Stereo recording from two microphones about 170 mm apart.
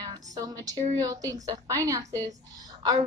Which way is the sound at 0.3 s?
20° right (ahead or behind).